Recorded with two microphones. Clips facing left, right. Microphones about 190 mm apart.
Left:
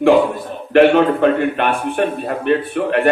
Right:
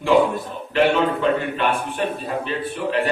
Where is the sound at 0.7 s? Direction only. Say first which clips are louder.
Left 7 dB; 60° left (ahead or behind).